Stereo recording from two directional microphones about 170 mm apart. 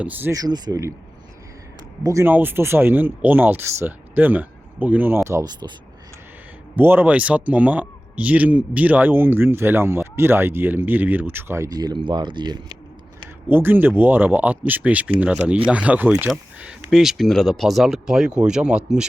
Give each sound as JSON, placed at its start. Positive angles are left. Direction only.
{"t": 0.0, "sound": "speech", "side_deg": -10}
{"t": 2.0, "sound": "speech", "side_deg": -15}
{"t": 6.7, "sound": "speech", "side_deg": -10}
{"t": 13.5, "sound": "speech", "side_deg": -10}